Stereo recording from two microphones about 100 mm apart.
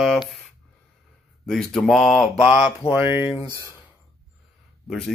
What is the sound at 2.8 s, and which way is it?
Speech, 30° left (ahead or behind).